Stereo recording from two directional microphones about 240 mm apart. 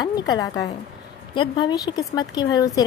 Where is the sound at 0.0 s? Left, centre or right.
Centre.